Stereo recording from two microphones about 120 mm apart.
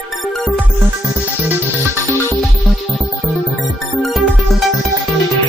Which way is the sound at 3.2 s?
Centre (ahead or behind).